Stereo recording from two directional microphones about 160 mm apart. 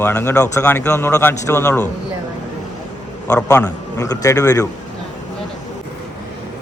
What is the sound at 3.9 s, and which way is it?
Speech, 20° left (ahead or behind).